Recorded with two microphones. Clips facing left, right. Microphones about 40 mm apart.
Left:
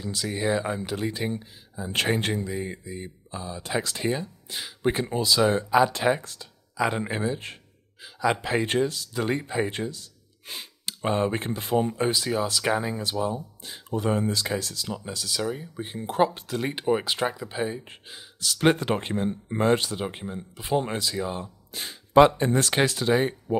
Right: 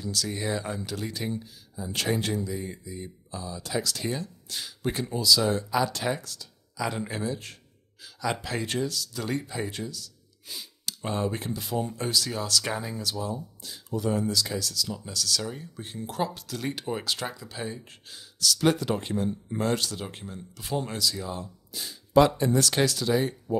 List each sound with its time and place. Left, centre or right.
0.0 s speech: left